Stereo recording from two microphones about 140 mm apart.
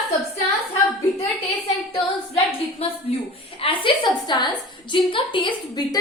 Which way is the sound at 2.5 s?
45° left (ahead or behind).